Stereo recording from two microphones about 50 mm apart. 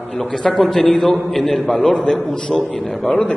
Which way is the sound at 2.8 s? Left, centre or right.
Centre.